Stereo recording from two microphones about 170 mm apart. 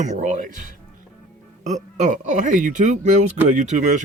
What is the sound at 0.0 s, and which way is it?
Speech, 45° right (ahead or behind).